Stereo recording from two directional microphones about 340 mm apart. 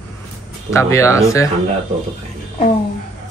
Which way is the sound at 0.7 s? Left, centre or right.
Centre.